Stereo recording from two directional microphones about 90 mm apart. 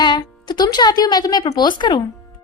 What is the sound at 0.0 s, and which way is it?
A woman's voice, 55° left (ahead or behind).